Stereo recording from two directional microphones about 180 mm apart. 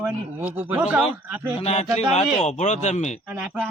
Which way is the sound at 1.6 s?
35° left (ahead or behind).